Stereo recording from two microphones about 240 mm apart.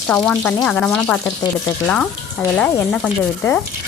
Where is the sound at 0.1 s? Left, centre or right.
Centre.